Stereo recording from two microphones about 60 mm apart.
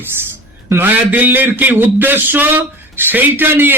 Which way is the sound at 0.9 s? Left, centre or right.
Right.